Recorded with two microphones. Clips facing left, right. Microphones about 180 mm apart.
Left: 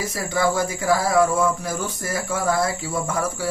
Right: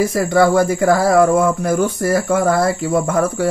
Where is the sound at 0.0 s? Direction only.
55° right (ahead or behind).